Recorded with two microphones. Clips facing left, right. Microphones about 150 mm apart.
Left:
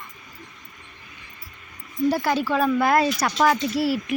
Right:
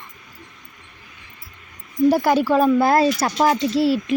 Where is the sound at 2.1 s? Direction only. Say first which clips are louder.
Right 5 dB; 45° right (ahead or behind).